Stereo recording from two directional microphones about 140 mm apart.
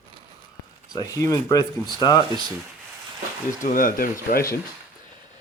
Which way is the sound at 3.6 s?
80° left.